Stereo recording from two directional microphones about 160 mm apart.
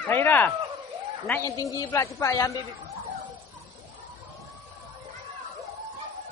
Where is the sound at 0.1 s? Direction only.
15° left (ahead or behind).